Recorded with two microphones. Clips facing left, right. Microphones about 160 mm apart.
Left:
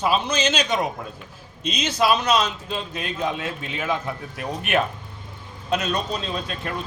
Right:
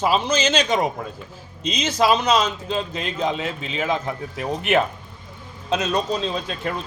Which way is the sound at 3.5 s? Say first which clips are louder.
Right 2 dB; 90° right.